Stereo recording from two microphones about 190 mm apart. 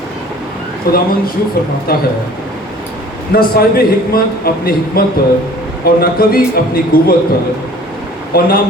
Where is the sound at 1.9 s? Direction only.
55° left (ahead or behind).